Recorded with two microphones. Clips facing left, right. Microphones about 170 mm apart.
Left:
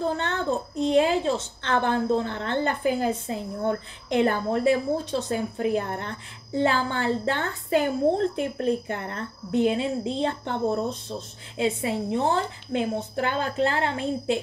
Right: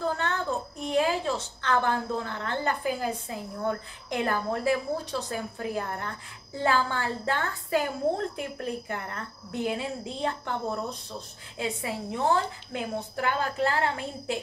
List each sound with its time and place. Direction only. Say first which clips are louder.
0.0 s a woman's voice: left 3 dB; 25° left (ahead or behind)